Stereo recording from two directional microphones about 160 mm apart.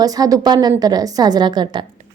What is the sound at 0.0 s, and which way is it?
A woman's voice, 25° right (ahead or behind).